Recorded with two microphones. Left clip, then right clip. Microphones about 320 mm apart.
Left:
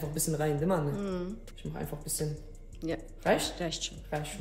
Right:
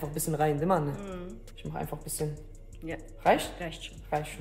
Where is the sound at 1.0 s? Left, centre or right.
Centre.